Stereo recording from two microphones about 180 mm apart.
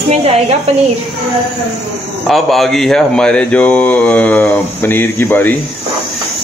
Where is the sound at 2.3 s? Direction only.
Centre (ahead or behind).